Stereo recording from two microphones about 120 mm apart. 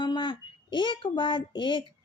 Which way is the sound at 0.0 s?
40° left (ahead or behind).